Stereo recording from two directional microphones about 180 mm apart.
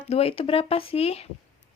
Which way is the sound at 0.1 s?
35° left (ahead or behind).